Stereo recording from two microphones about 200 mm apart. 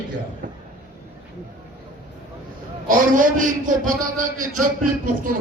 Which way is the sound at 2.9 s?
45° right (ahead or behind).